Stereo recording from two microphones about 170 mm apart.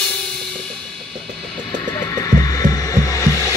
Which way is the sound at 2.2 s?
20° left (ahead or behind).